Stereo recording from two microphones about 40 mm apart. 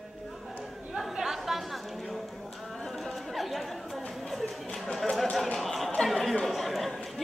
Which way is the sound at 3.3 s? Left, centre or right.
Centre.